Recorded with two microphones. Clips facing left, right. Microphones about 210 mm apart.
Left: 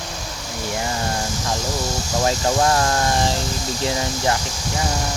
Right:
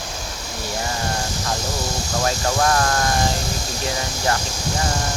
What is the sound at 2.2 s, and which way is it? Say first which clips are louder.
Speech: left 2 dB; 20° left (ahead or behind).